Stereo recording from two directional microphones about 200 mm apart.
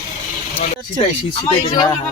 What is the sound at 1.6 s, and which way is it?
Speech, 20° left (ahead or behind).